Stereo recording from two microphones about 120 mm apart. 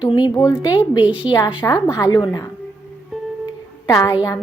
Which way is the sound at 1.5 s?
35° left (ahead or behind).